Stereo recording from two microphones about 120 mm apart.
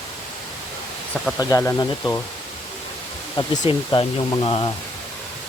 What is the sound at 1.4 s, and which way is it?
Speech, 25° left (ahead or behind).